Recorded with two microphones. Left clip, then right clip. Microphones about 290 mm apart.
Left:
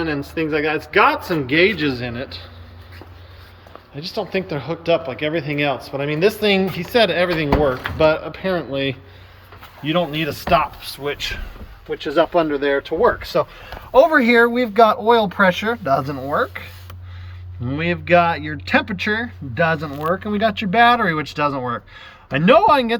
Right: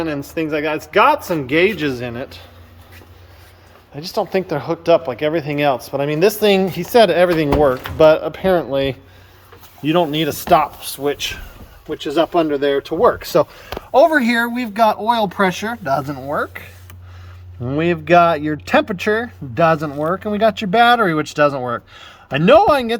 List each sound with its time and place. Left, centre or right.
0.3 s speech: centre
3.9 s speech: centre
12.9 s speech: right
13.5 s speech: centre
17.7 s speech: centre